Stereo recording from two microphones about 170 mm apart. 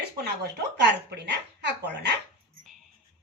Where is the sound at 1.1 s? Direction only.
85° right.